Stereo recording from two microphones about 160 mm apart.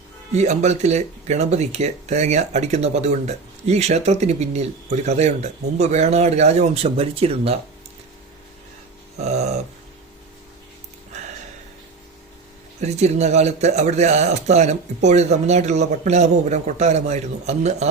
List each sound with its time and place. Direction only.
0.3 s speech: 45° right (ahead or behind)
9.2 s speech: 45° right (ahead or behind)
12.8 s speech: 45° right (ahead or behind)